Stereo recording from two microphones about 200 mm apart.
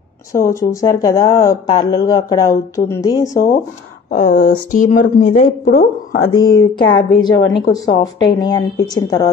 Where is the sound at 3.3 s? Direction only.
40° left (ahead or behind).